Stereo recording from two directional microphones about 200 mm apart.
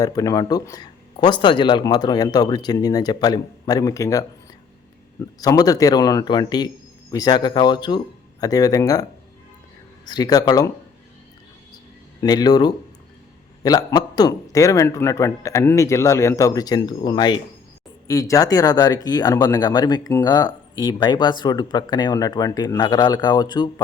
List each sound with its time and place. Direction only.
0.0 s speech: 20° left (ahead or behind)
5.4 s speech: 20° left (ahead or behind)
10.1 s speech: 20° left (ahead or behind)
12.2 s a man's voice: 20° left (ahead or behind)